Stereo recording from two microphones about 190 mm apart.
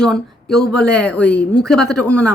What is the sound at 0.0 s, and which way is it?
A woman's voice, centre (ahead or behind).